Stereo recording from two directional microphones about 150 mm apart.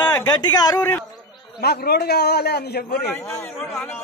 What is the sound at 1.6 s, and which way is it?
A man's voice, 90° left.